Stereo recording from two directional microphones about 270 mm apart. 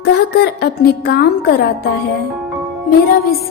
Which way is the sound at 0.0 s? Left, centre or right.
Left.